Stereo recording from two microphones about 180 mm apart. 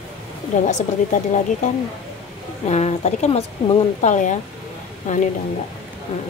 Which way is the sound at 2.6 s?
40° left (ahead or behind).